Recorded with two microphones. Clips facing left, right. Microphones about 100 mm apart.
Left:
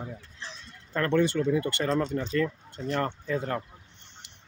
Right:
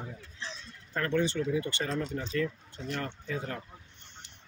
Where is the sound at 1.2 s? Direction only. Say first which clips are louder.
Left 4 dB; 60° left (ahead or behind).